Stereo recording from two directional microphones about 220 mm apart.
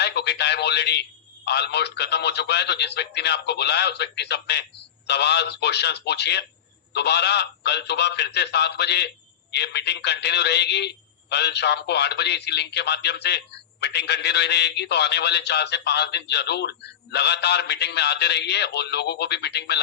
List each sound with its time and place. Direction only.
0.0 s a man's voice: 50° left (ahead or behind)